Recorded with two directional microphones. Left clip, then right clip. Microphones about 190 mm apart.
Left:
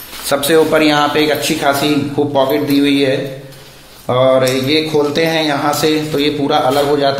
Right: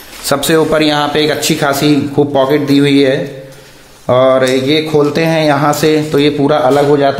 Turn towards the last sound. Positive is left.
turn(degrees=-50)  # may be behind; listen again after turning